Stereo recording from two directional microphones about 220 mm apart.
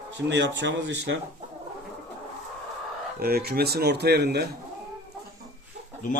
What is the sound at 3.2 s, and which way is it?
Speech, 45° right (ahead or behind).